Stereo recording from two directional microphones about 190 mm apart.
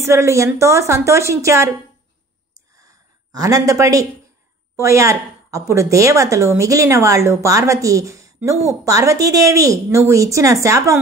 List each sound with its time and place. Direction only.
0.0 s speech: 15° right (ahead or behind)
2.8 s a sound: 20° right (ahead or behind)
4.7 s speech: 15° right (ahead or behind)